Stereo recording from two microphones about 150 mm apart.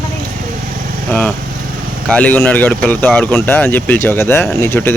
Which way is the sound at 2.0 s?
10° left (ahead or behind).